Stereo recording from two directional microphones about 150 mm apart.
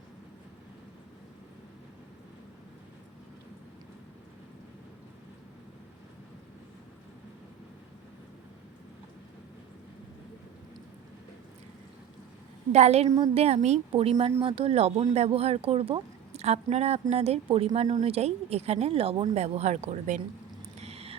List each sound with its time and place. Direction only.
12.7 s speech: 45° right (ahead or behind)
13.1 s a woman's voice: 25° right (ahead or behind)
13.3 s speech: 45° right (ahead or behind)
19.3 s speech: 45° right (ahead or behind)
20.7 s a sound: 45° right (ahead or behind)